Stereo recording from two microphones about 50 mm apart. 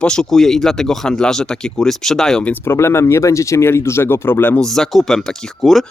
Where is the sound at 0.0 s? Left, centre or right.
Centre.